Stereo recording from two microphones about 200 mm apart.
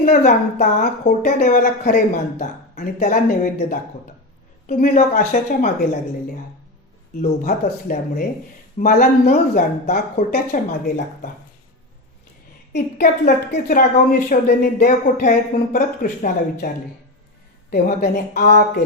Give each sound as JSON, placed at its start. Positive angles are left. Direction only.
{"t": 0.0, "sound": "speech", "side_deg": 40}
{"t": 7.2, "sound": "speech", "side_deg": 45}
{"t": 12.7, "sound": "speech", "side_deg": 55}
{"t": 17.7, "sound": "speech", "side_deg": 50}